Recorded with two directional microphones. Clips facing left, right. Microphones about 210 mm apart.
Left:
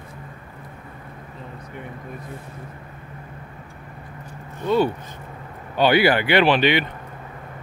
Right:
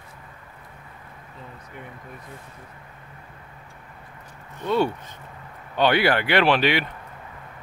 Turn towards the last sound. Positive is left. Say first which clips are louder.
# left 2 dB
turn(degrees=0)  # may be behind; listen again after turning